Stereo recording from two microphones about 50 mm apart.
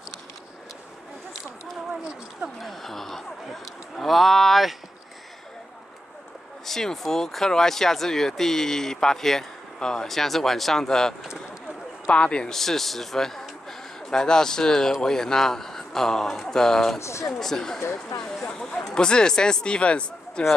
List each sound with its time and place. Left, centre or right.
2.6 s a sound: centre
6.6 s speech: centre
12.5 s speech: centre
17.0 s speech: left
17.4 s speech: centre